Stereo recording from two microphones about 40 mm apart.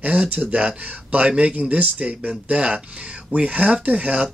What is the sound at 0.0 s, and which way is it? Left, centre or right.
Speech, right.